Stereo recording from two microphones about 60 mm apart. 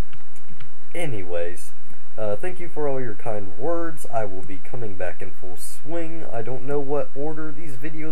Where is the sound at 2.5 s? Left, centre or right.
Right.